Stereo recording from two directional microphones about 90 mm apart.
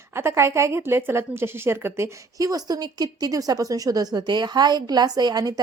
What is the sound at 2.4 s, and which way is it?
A woman's voice, 45° right (ahead or behind).